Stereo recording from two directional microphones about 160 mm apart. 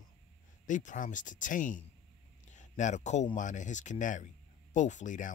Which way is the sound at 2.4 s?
50° left (ahead or behind).